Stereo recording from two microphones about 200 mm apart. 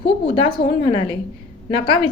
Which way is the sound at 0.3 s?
25° left (ahead or behind).